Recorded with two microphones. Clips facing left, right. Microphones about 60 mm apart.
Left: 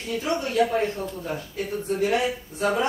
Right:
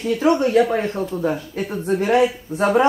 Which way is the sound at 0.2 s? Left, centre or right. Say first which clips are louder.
Right 7 dB; right.